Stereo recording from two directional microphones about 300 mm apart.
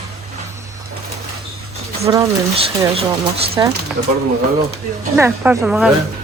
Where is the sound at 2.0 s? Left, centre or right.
Centre.